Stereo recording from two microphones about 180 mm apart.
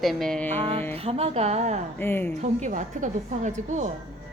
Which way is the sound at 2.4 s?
40° right (ahead or behind).